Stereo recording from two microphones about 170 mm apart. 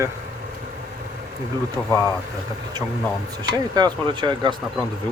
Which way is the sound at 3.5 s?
25° right (ahead or behind).